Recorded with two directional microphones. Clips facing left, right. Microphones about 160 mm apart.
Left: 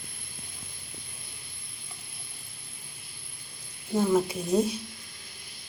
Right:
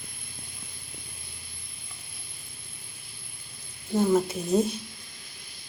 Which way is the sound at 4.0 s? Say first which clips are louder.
Right 1 dB; 5° right (ahead or behind).